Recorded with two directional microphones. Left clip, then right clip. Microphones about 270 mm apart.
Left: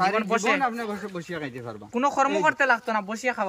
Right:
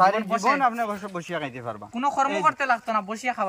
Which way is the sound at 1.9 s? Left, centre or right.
Centre.